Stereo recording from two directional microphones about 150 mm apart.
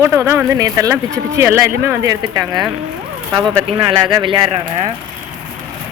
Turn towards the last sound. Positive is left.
turn(degrees=-30)  # may be behind; listen again after turning